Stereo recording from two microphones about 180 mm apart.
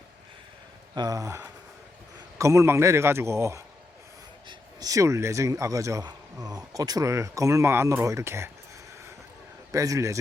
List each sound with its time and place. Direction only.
0.9 s speech: 20° right (ahead or behind)
9.7 s speech: 15° right (ahead or behind)